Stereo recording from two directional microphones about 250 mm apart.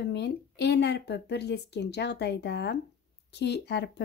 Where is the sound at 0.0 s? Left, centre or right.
Left.